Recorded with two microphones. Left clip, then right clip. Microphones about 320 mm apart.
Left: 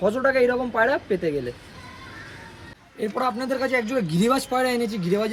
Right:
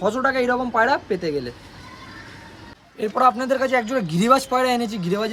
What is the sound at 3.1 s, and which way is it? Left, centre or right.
Speech, centre.